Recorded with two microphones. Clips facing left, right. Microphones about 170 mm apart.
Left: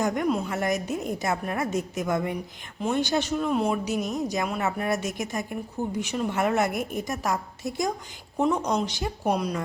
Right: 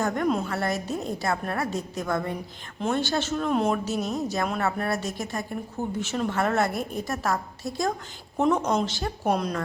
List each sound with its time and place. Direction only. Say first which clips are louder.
0.0 s a woman's voice: even; 15° left (ahead or behind)
3.8 s a woman's voice: even; 15° left (ahead or behind)